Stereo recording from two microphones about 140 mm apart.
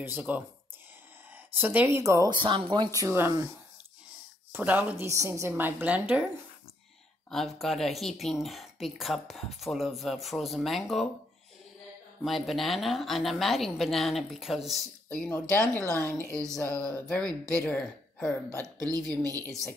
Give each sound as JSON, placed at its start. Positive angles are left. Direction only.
{"t": 0.0, "sound": "speech", "side_deg": -15}
{"t": 1.5, "sound": "speech", "side_deg": -15}
{"t": 2.3, "sound": "speech", "side_deg": -35}
{"t": 4.5, "sound": "speech", "side_deg": -15}
{"t": 7.2, "sound": "speech", "side_deg": 0}
{"t": 12.2, "sound": "speech", "side_deg": 0}
{"t": 15.0, "sound": "speech", "side_deg": 10}
{"t": 15.6, "sound": "speech", "side_deg": -20}
{"t": 16.0, "sound": "speech", "side_deg": 5}
{"t": 16.6, "sound": "speech", "side_deg": -25}
{"t": 17.6, "sound": "a woman's voice", "side_deg": 10}
{"t": 18.6, "sound": "speech", "side_deg": -25}